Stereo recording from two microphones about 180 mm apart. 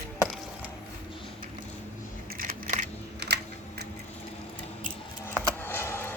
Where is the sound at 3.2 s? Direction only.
70° right (ahead or behind).